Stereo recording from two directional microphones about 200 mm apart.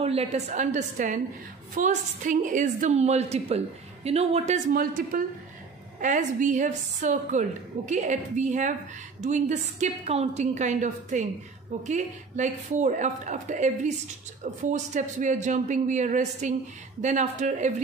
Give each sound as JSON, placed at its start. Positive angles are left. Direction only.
{"t": 0.0, "sound": "a woman's voice", "side_deg": -30}
{"t": 4.7, "sound": "a man's voice", "side_deg": -40}